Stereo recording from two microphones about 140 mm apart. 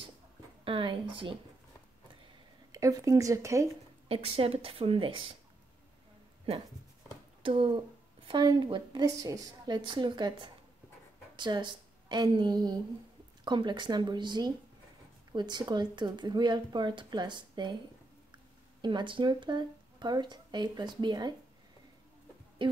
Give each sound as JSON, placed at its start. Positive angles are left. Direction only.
{"t": 0.7, "sound": "speech", "side_deg": -35}
{"t": 2.7, "sound": "speech", "side_deg": -25}
{"t": 4.1, "sound": "speech", "side_deg": -45}
{"t": 7.4, "sound": "speech", "side_deg": -35}
{"t": 18.8, "sound": "speech", "side_deg": -35}
{"t": 22.6, "sound": "speech", "side_deg": -35}